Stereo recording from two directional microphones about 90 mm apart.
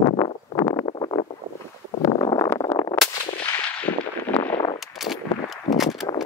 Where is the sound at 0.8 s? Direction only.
60° left (ahead or behind).